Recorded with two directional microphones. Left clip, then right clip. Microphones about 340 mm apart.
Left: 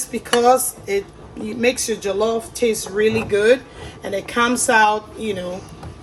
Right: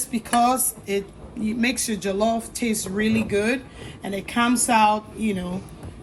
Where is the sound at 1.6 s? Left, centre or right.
Centre.